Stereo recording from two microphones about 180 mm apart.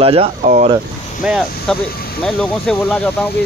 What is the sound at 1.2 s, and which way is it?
Speech, 5° right (ahead or behind).